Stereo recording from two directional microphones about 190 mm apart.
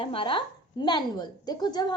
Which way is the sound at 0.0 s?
30° left (ahead or behind).